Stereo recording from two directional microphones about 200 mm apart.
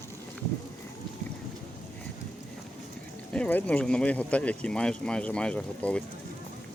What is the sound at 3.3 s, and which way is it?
Speech, 5° left (ahead or behind).